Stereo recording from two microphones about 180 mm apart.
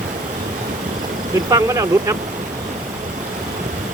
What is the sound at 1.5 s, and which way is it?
Speech, 20° right (ahead or behind).